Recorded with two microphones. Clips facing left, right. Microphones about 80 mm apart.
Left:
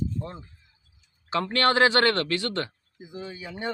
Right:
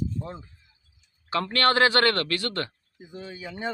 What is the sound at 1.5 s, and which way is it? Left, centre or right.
A man's voice, left.